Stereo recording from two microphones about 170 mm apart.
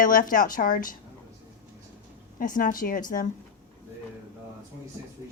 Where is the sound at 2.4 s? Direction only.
55° left (ahead or behind).